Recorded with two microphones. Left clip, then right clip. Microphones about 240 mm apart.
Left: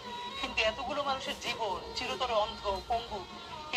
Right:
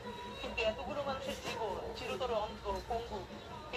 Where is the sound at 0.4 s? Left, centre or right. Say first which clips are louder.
Left 5 dB; left.